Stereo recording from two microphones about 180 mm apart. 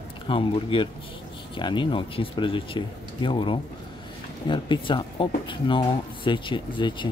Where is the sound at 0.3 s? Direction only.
30° left (ahead or behind).